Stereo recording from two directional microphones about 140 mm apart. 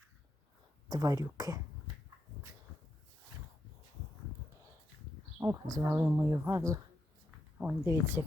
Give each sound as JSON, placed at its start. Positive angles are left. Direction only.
{"t": 0.9, "sound": "speech", "side_deg": -25}
{"t": 5.4, "sound": "speech", "side_deg": -20}